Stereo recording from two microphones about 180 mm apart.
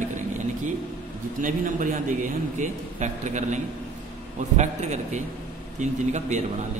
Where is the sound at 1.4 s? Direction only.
45° right (ahead or behind).